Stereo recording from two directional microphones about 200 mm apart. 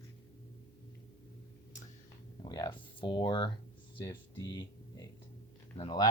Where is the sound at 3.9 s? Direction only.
20° left (ahead or behind).